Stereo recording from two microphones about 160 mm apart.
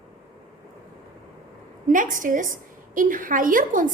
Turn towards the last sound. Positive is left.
turn(degrees=-55)  # may be behind; listen again after turning